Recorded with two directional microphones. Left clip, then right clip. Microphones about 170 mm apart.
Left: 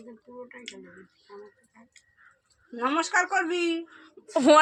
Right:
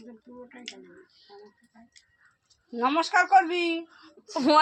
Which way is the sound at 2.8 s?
30° right (ahead or behind).